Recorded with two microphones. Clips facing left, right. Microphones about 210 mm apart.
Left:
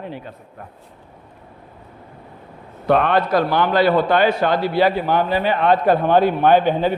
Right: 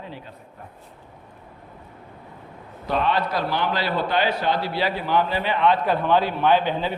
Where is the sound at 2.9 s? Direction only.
60° left (ahead or behind).